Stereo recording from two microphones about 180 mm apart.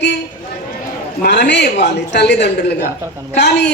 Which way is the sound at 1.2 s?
70° left (ahead or behind).